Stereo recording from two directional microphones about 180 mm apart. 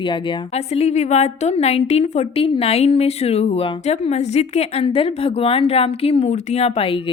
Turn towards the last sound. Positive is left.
turn(degrees=30)  # may be behind; listen again after turning